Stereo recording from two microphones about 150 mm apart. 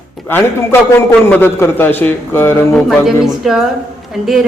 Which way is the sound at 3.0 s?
Centre (ahead or behind).